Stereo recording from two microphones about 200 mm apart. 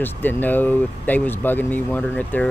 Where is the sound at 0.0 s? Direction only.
10° left (ahead or behind).